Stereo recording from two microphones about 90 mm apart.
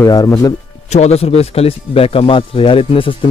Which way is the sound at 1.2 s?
90° left.